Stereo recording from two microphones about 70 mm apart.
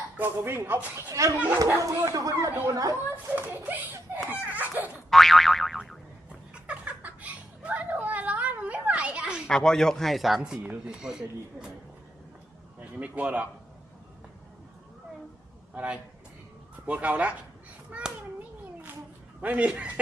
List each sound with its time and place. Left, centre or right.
0.2 s speech: right
1.1 s speech: right
3.3 s a child's voice: right
4.3 s a sound: right
5.1 s boing: centre
6.5 s a sound: centre
9.5 s speech: centre
13.0 s a child's voice: centre
15.7 s a child's voice: right
19.4 s a child's voice: centre